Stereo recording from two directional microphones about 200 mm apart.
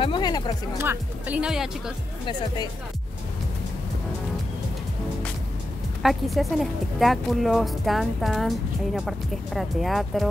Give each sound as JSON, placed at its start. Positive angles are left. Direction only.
{"t": 0.0, "sound": "speech", "side_deg": 20}
{"t": 0.7, "sound": "speech", "side_deg": -10}
{"t": 2.2, "sound": "speech", "side_deg": 20}
{"t": 6.0, "sound": "a woman's voice", "side_deg": 0}